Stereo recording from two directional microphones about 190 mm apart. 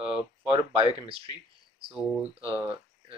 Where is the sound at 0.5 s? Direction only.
30° right (ahead or behind).